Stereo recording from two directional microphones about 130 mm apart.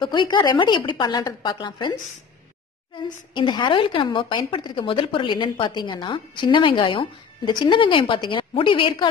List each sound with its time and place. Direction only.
0.0 s speech: 35° left (ahead or behind)
3.3 s speech: 35° left (ahead or behind)